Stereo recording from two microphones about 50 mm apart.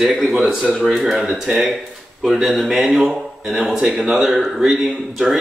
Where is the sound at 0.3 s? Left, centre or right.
Centre.